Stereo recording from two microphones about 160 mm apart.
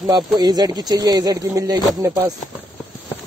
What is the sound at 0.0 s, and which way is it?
Speech, 25° right (ahead or behind).